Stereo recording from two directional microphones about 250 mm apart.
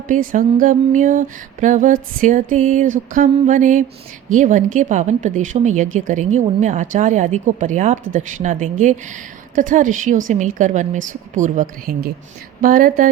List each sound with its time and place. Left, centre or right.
0.1 s a woman's voice: right